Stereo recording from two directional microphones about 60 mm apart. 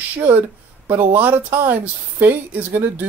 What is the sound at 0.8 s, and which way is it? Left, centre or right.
Speech, right.